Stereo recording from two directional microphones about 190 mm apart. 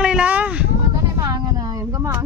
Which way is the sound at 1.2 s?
20° right (ahead or behind).